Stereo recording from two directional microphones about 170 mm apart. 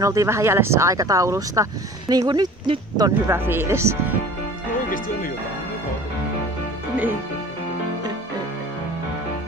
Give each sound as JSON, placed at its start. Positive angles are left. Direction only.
{"t": 0.0, "sound": "speech", "side_deg": -20}
{"t": 3.3, "sound": "speech", "side_deg": -15}
{"t": 4.8, "sound": "music", "side_deg": 55}